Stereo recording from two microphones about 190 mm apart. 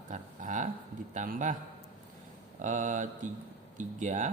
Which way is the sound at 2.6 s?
40° right (ahead or behind).